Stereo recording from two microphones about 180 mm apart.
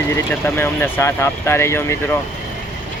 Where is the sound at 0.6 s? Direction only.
15° left (ahead or behind).